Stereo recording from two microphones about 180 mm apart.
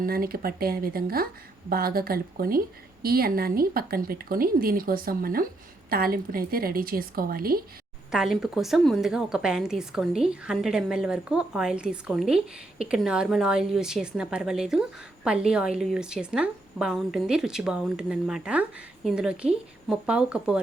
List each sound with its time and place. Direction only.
0.0 s a woman's voice: 55° right (ahead or behind)
8.1 s a woman's voice: centre (ahead or behind)